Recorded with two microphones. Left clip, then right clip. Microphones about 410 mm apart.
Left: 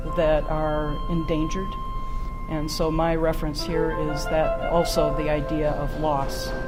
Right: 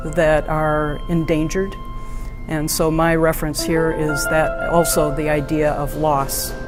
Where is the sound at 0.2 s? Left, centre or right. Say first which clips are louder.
Right 6 dB; right.